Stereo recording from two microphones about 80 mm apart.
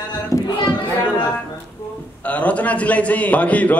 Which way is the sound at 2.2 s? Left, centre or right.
Centre.